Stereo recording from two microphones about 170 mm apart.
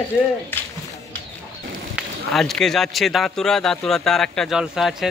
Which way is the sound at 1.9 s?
Centre (ahead or behind).